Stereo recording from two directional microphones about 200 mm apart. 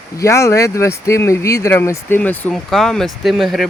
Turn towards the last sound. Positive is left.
turn(degrees=0)  # may be behind; listen again after turning